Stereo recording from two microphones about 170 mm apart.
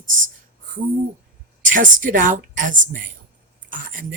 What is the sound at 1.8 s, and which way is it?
Speech, 50° right (ahead or behind).